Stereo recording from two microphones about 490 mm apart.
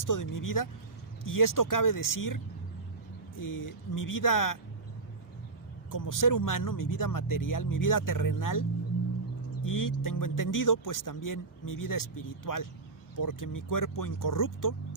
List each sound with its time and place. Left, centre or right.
0.0 s speech: left
5.9 s speech: left
9.6 s speech: left